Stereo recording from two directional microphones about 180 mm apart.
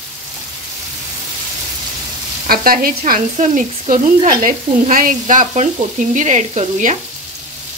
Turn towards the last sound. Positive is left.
turn(degrees=-40)  # may be behind; listen again after turning